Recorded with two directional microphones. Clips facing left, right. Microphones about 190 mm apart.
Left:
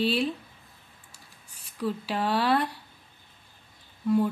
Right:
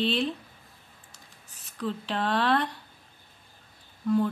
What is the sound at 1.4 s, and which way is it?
Speech, 10° left (ahead or behind).